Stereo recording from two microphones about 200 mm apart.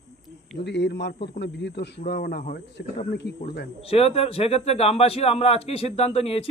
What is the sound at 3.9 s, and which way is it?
A man's voice, 30° left (ahead or behind).